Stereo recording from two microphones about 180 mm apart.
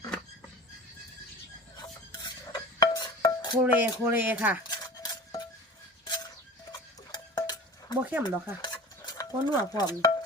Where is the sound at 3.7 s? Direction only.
10° right (ahead or behind).